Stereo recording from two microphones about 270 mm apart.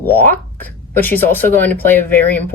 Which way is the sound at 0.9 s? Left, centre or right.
Centre.